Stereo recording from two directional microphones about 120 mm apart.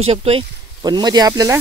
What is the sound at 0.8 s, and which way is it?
Speech, 35° right (ahead or behind).